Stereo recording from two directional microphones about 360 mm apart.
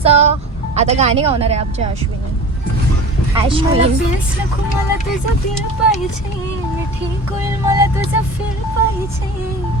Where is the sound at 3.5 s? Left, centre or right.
Centre.